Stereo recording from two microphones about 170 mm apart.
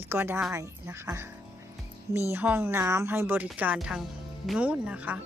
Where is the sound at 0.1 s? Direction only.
10° right (ahead or behind).